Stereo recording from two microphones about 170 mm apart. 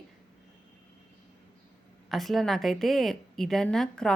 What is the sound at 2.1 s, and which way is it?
Speech, centre (ahead or behind).